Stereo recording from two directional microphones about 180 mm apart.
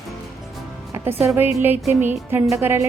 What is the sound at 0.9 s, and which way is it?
Speech, 15° right (ahead or behind).